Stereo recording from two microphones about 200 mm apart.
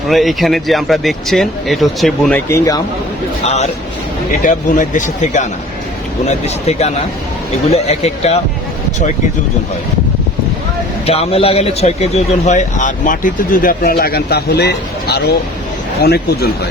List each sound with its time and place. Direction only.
0.1 s speech: centre (ahead or behind)
3.4 s speech: 35° left (ahead or behind)
11.0 s speech: 30° left (ahead or behind); by 16.5 s 50° left (ahead or behind)